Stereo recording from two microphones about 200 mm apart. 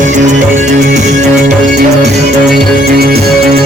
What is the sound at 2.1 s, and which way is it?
Music, 55° right (ahead or behind).